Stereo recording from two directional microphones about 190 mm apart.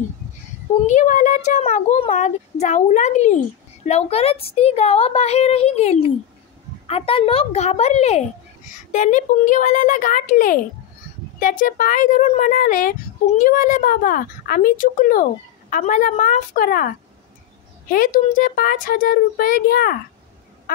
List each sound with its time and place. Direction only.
0.8 s speech: 40° left (ahead or behind)